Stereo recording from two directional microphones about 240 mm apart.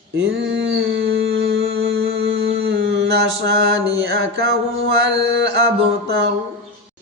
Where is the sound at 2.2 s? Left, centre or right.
Right.